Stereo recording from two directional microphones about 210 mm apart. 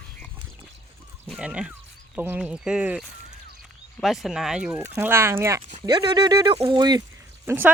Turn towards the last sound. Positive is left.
turn(degrees=-10)  # may be behind; listen again after turning